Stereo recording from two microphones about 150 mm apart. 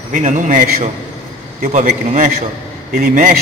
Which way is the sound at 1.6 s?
60° right (ahead or behind).